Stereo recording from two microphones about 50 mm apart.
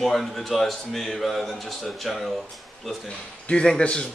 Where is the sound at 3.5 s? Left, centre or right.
Centre.